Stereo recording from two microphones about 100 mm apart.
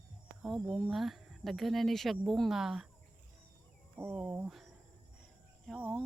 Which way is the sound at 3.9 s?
15° right (ahead or behind).